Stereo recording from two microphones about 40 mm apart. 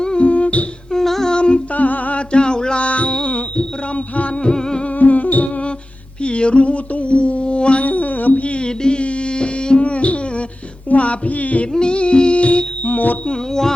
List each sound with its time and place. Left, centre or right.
0.2 s music: left
0.9 s humming: centre
1.3 s music: left
1.7 s music: left
2.3 s a sound: left
2.8 s music: left
4.4 s music: centre
4.9 s music: left
6.2 s a sound: left
7.9 s music: left
10.8 s a sound: left
11.7 s music: left
13.2 s music: centre